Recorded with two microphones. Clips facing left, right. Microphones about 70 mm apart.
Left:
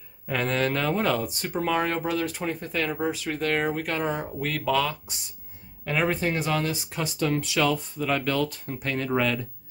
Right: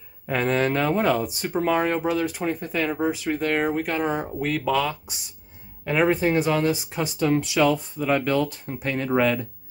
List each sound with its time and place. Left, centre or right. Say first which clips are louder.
0.3 s speech: right 3 dB; right